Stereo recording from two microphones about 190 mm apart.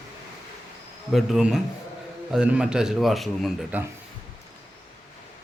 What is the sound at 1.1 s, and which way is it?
A man's voice, centre (ahead or behind).